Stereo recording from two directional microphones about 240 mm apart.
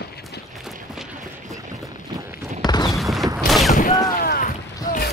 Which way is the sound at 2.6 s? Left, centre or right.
Centre.